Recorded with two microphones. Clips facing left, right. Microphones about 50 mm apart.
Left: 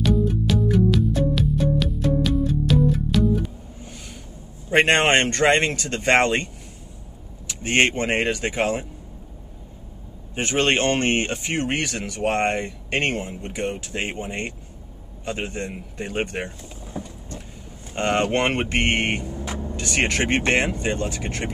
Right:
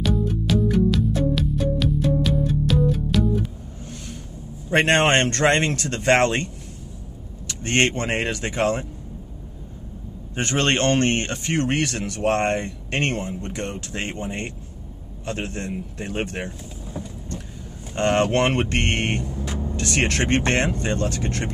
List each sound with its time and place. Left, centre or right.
0.0 s music: centre
4.6 s speech: centre
10.3 s speech: centre